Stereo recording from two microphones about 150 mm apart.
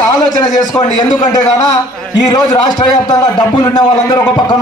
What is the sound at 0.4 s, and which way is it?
Speech, 25° left (ahead or behind).